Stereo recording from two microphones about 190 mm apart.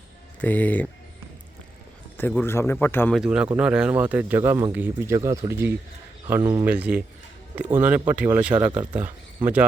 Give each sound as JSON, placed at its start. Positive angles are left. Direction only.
{"t": 0.4, "sound": "a man's voice", "side_deg": 10}
{"t": 2.1, "sound": "a man's voice", "side_deg": 10}
{"t": 3.2, "sound": "speech", "side_deg": -5}
{"t": 6.7, "sound": "speech", "side_deg": -5}